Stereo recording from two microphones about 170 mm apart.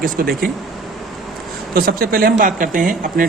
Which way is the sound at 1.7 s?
60° right (ahead or behind).